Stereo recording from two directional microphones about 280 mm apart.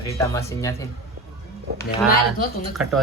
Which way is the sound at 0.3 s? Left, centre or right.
Centre.